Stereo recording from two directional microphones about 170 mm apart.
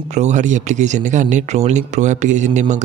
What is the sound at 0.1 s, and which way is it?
Speech, 45° right (ahead or behind).